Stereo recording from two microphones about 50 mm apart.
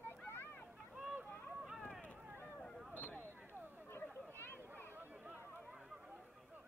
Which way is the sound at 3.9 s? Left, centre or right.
Left.